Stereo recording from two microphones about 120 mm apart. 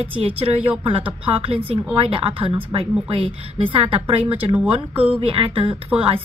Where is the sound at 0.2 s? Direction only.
55° right (ahead or behind).